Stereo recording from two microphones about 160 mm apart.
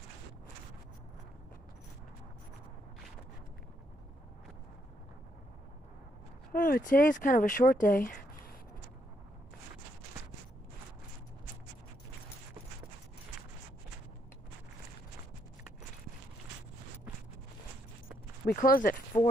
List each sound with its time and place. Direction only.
6.5 s speech: 60° left (ahead or behind)
18.4 s speech: 60° left (ahead or behind)